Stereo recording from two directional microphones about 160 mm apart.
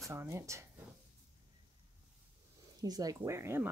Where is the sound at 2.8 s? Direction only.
25° right (ahead or behind).